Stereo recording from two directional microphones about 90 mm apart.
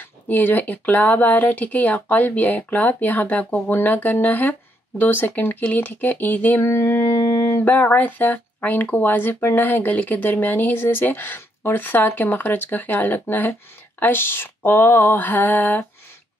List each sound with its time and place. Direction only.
0.0 s speech: 20° left (ahead or behind)
6.6 s a sound: 30° left (ahead or behind)
7.7 s speech: 20° left (ahead or behind)